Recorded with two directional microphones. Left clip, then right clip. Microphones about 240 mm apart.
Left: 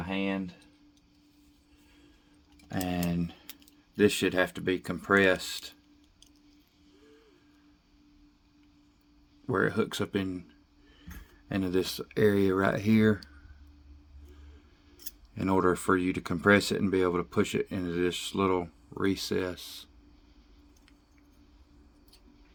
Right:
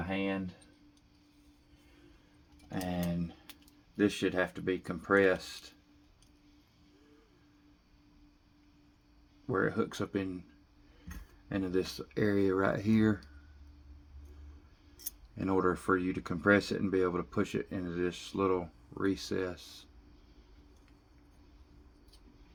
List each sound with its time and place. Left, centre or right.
0.1 s a sound: left
2.6 s tick-tock: left
3.9 s speech: left
9.5 s speech: left
11.4 s speech: left
15.4 s speech: left